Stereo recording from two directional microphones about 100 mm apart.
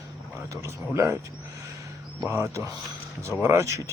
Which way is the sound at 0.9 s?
30° right (ahead or behind).